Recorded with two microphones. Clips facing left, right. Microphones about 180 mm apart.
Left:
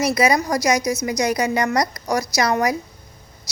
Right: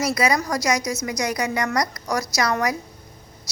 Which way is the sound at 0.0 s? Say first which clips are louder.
Left 3 dB; 20° left (ahead or behind).